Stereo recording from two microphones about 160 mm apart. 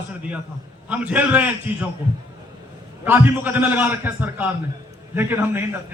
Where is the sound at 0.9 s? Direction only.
10° right (ahead or behind).